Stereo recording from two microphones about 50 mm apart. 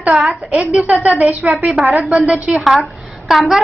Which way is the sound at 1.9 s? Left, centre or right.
Right.